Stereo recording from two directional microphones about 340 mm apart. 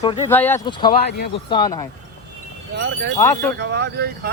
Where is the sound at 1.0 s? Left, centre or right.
Left.